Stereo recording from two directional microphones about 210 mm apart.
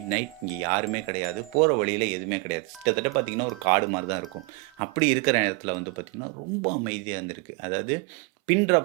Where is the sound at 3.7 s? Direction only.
15° right (ahead or behind).